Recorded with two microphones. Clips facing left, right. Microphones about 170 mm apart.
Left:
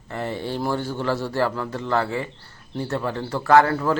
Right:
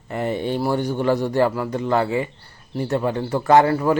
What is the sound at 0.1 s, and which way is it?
Speech, 15° right (ahead or behind).